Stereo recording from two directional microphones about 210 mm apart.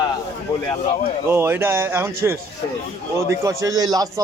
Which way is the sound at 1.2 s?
10° right (ahead or behind).